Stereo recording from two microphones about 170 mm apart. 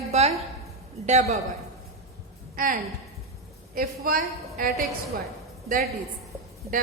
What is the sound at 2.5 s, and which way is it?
A woman's voice, 55° right (ahead or behind).